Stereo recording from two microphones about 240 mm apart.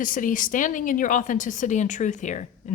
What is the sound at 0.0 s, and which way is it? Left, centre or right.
Speech, left.